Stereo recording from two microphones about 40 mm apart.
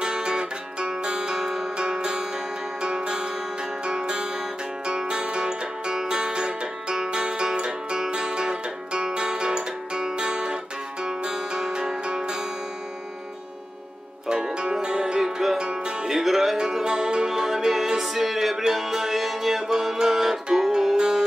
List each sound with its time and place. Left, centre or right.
0.0 s music: right
14.3 s music: right
16.1 s music: centre
16.5 s music: centre
17.3 s music: centre